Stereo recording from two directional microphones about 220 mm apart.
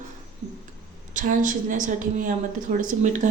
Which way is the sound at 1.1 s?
35° right (ahead or behind).